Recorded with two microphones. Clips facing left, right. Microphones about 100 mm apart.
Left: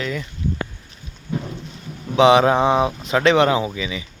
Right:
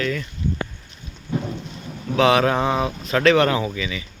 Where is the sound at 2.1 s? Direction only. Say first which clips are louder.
Left 4 dB; 20° left (ahead or behind).